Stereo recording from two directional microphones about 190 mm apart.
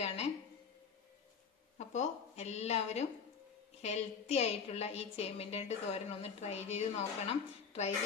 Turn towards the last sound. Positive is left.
turn(degrees=35)  # may be behind; listen again after turning